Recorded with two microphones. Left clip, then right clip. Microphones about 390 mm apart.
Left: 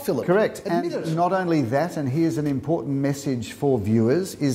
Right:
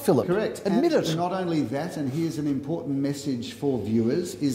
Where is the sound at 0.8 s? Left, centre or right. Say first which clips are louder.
Right 5 dB; right.